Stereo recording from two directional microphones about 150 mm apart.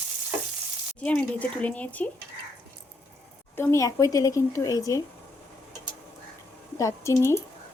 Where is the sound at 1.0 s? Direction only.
10° left (ahead or behind).